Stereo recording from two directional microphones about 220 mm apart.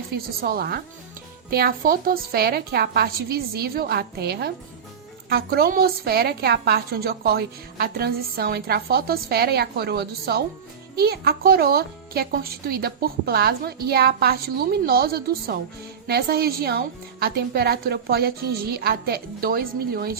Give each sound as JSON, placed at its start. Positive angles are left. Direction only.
{"t": 0.4, "sound": "a woman's voice", "side_deg": -45}